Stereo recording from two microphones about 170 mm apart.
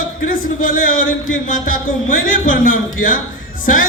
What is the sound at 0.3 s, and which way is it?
A man's voice, 55° left (ahead or behind).